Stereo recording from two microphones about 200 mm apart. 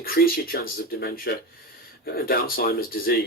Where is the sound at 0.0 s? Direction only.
50° left (ahead or behind).